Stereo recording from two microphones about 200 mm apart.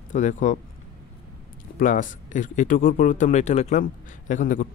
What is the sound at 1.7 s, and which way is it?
Speech, 40° left (ahead or behind).